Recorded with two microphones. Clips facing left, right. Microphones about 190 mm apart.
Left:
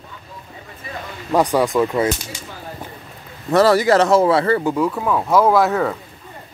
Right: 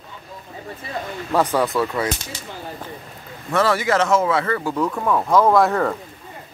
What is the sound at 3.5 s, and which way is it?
Speech, 35° left (ahead or behind).